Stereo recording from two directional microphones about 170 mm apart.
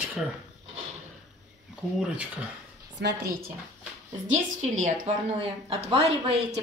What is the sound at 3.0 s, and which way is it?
Speech, 75° right (ahead or behind).